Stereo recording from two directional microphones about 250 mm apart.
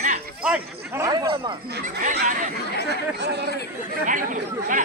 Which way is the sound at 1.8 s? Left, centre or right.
Right.